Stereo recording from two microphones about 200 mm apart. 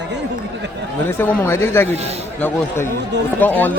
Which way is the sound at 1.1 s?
10° left (ahead or behind).